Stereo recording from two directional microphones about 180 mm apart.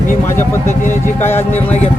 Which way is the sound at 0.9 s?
10° left (ahead or behind).